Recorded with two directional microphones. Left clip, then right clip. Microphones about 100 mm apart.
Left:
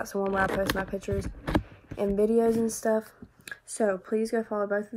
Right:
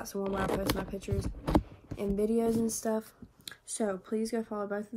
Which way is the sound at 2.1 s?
20° left (ahead or behind).